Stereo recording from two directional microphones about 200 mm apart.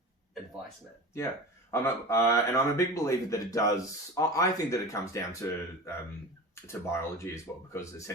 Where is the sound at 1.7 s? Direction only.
15° left (ahead or behind).